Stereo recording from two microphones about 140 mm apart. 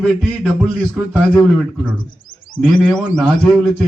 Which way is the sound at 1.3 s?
10° left (ahead or behind).